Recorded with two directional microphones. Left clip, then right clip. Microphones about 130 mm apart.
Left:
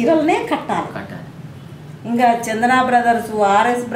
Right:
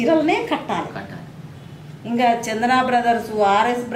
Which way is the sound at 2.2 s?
Centre (ahead or behind).